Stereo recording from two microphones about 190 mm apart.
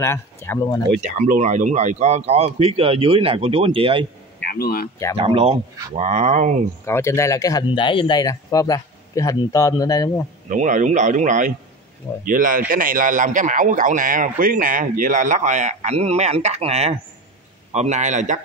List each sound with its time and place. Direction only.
0.0 s speech: 15° left (ahead or behind)
1.0 s speech: 40° right (ahead or behind)
4.5 s speech: 55° left (ahead or behind)
5.1 s speech: 30° right (ahead or behind)
6.9 s speech: 15° left (ahead or behind)
10.5 s a man's voice: 40° right (ahead or behind)